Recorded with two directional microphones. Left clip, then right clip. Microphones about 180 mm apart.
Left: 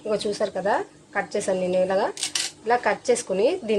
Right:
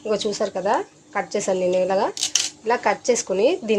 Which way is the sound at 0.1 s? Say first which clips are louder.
Right 2 dB; 40° right (ahead or behind).